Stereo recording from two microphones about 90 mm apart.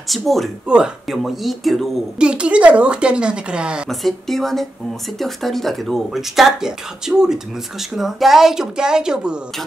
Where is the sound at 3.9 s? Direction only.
5° left (ahead or behind).